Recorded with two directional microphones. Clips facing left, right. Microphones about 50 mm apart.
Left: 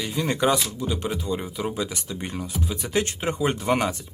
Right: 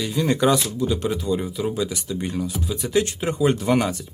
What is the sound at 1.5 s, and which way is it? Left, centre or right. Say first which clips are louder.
Speech: right 3 dB; left.